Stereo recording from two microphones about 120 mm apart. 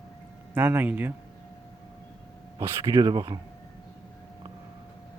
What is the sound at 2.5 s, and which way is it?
Speech, 30° right (ahead or behind).